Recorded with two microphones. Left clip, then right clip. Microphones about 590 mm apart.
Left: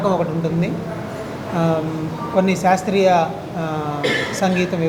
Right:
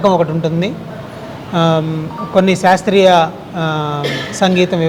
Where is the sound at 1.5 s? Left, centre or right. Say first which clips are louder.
Right 6 dB; right.